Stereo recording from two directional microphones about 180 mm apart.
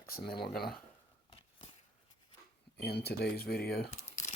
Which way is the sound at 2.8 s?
60° left (ahead or behind).